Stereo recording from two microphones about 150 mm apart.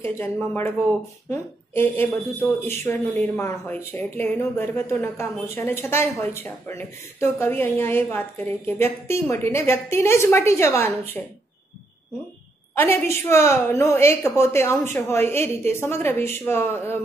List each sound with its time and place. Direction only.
0.0 s speech: 15° left (ahead or behind)
12.7 s speech: 15° left (ahead or behind)